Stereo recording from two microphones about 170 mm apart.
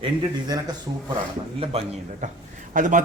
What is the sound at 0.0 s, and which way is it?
A man's voice, 25° right (ahead or behind).